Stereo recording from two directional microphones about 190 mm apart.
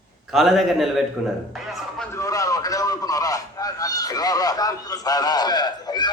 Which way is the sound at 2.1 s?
15° left (ahead or behind).